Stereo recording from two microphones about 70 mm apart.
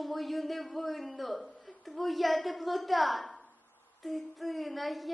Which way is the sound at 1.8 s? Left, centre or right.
Centre.